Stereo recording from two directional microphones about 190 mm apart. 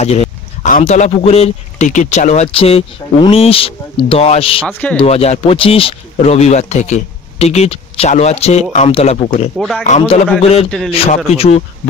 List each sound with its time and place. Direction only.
0.0 s speech: 35° left (ahead or behind)
4.6 s speech: 5° left (ahead or behind)
4.9 s speech: 35° left (ahead or behind)
9.6 s speech: centre (ahead or behind)
9.8 s speech: 35° left (ahead or behind)